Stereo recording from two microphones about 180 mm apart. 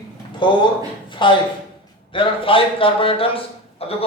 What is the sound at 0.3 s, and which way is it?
A man's voice, 25° left (ahead or behind).